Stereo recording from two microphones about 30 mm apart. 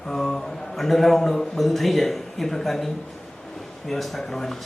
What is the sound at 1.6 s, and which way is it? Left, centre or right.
A man's voice, centre.